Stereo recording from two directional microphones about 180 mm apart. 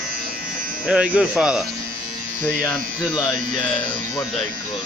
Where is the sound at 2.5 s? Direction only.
5° left (ahead or behind).